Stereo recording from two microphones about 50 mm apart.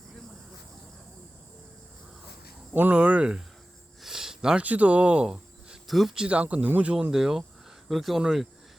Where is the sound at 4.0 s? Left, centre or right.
Centre.